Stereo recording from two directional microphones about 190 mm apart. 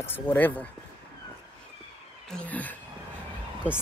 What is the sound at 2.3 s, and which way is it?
Speech, 10° left (ahead or behind).